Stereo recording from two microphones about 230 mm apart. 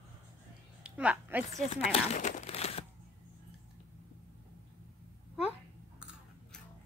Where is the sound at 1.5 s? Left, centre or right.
Left.